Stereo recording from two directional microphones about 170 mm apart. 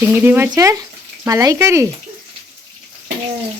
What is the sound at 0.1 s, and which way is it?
Speech, 10° right (ahead or behind).